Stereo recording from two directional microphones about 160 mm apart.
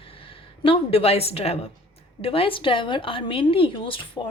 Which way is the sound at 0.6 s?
35° left (ahead or behind).